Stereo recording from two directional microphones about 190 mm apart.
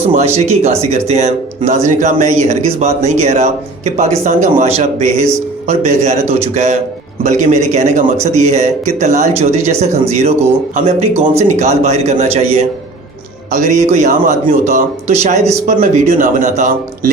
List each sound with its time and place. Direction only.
0.1 s speech: 35° right (ahead or behind)